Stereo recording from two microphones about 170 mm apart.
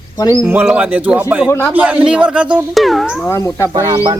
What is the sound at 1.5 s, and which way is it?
Speech, 15° left (ahead or behind).